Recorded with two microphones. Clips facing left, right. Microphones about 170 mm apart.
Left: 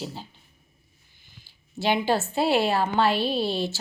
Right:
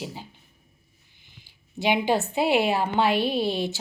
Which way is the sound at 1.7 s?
15° right (ahead or behind).